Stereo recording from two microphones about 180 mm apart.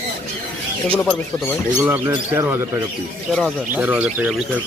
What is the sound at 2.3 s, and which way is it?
Speech, 15° right (ahead or behind).